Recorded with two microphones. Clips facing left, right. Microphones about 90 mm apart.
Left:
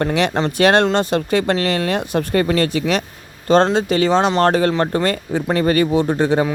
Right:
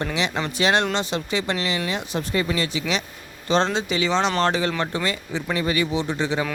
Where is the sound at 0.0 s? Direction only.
55° left (ahead or behind).